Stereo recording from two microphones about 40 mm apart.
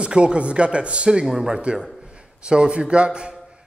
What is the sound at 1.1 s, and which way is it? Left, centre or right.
Speech, centre.